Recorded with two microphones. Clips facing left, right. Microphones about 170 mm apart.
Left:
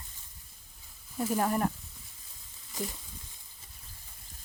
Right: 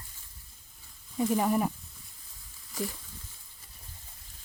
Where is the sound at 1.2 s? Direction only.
5° right (ahead or behind).